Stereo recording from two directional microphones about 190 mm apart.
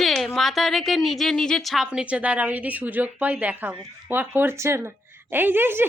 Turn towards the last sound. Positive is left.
turn(degrees=-10)  # may be behind; listen again after turning